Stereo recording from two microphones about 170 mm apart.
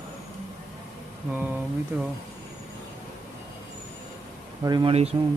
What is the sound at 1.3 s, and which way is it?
Speech, 10° right (ahead or behind).